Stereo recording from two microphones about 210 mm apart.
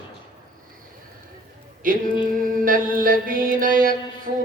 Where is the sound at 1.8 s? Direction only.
40° right (ahead or behind).